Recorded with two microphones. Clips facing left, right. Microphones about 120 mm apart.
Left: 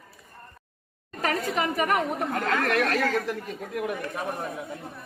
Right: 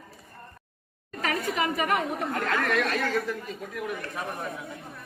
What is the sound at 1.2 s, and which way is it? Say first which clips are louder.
Speech: left 1 dB; 40° left (ahead or behind).